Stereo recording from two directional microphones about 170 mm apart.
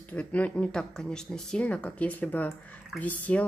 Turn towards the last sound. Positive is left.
turn(degrees=10)  # may be behind; listen again after turning